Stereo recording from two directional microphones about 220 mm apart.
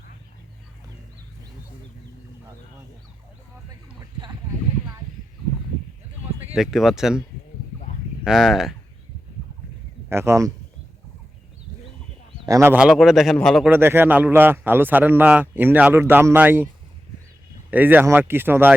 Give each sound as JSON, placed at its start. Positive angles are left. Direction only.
{"t": 4.0, "sound": "a man's voice", "side_deg": -15}
{"t": 6.5, "sound": "a man's voice", "side_deg": 0}
{"t": 8.2, "sound": "a man's voice", "side_deg": 0}
{"t": 10.1, "sound": "a man's voice", "side_deg": -10}
{"t": 12.5, "sound": "a man's voice", "side_deg": -10}
{"t": 13.7, "sound": "a man's voice", "side_deg": -10}
{"t": 17.7, "sound": "a man's voice", "side_deg": -5}